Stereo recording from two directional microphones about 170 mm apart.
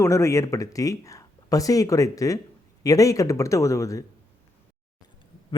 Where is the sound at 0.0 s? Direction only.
15° left (ahead or behind).